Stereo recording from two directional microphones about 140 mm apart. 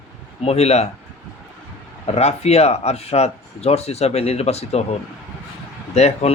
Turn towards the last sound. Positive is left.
turn(degrees=50)  # may be behind; listen again after turning